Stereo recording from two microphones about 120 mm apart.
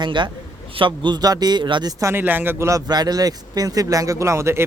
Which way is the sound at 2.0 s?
20° right (ahead or behind).